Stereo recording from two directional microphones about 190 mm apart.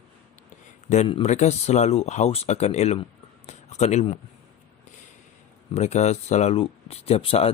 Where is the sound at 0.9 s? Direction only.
30° left (ahead or behind).